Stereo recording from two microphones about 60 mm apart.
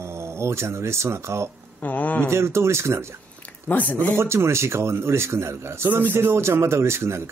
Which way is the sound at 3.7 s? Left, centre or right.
Left.